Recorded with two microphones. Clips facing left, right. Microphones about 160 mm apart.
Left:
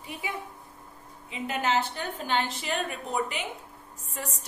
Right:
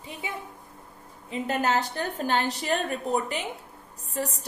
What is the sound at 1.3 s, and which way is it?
A woman's voice, 40° right (ahead or behind).